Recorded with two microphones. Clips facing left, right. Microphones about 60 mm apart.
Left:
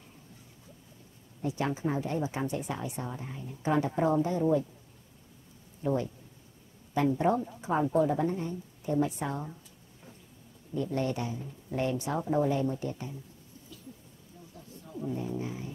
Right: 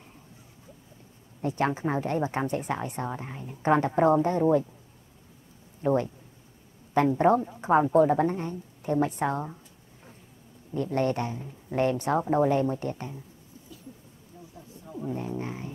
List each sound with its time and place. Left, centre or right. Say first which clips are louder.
1.4 s a woman's voice: right 4 dB; right
5.8 s a woman's voice: right 5 dB; right
10.7 s a woman's voice: right 4 dB; right
15.0 s speech: right 2 dB; right